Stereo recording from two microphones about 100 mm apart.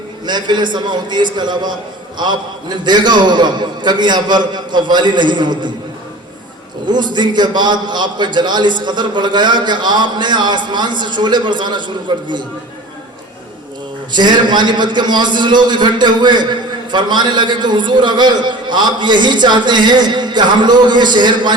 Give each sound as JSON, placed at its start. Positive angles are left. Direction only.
{"t": 0.3, "sound": "a man's voice", "side_deg": -45}
{"t": 6.8, "sound": "a man's voice", "side_deg": -45}
{"t": 14.1, "sound": "a man's voice", "side_deg": -50}